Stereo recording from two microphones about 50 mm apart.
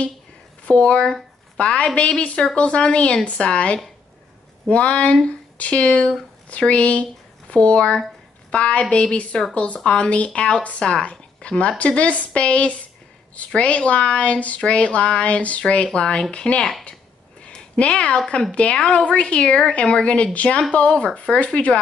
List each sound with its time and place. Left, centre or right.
0.7 s a woman's voice: left
17.4 s a sound: left
18.5 s a woman's voice: left